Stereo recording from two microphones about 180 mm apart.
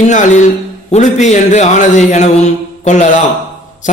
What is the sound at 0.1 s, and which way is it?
A man's voice, 45° left (ahead or behind).